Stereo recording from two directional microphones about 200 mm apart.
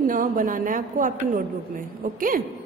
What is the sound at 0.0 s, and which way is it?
A woman's voice, 45° right (ahead or behind).